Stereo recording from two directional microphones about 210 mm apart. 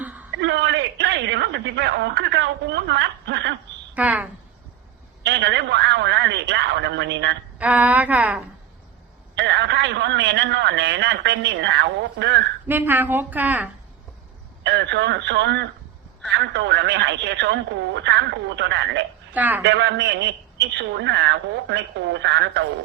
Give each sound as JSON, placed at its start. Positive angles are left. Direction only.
{"t": 0.0, "sound": "a sound", "side_deg": -5}
{"t": 0.3, "sound": "telephone", "side_deg": -55}
{"t": 3.9, "sound": "a woman's voice", "side_deg": -5}
{"t": 5.2, "sound": "a man's voice", "side_deg": -55}
{"t": 7.6, "sound": "a woman's voice", "side_deg": -5}
{"t": 9.3, "sound": "a man's voice", "side_deg": -55}
{"t": 12.6, "sound": "a woman's voice", "side_deg": -10}
{"t": 14.6, "sound": "a man's voice", "side_deg": -55}
{"t": 19.3, "sound": "a woman's voice", "side_deg": -10}
{"t": 19.6, "sound": "a man's voice", "side_deg": -55}